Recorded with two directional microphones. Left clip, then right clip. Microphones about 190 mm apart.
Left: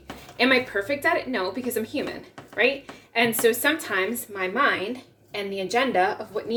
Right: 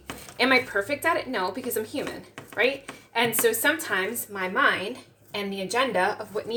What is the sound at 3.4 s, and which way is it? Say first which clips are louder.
A woman's voice: left 1 dB; centre (ahead or behind).